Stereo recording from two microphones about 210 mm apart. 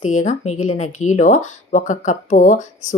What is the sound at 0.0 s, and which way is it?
Speech, 35° left (ahead or behind).